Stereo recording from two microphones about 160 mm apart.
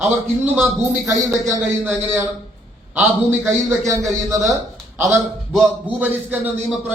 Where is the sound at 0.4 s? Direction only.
5° right (ahead or behind).